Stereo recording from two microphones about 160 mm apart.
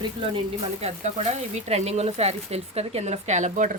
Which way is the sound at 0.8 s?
45° right (ahead or behind).